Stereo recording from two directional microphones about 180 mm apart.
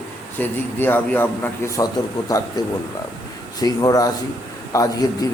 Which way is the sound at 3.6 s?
20° left (ahead or behind).